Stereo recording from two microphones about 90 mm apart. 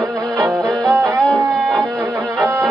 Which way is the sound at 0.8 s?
30° right (ahead or behind).